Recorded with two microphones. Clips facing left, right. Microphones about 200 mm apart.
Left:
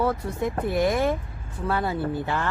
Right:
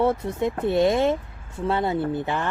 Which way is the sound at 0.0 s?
25° right (ahead or behind).